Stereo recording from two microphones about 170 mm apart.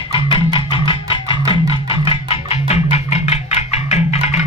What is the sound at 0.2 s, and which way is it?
Music, 30° left (ahead or behind).